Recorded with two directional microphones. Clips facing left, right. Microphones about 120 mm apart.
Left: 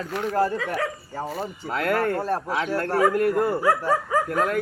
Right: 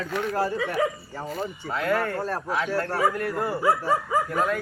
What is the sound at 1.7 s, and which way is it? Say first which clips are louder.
Speech: left 1 dB; 70° left (ahead or behind).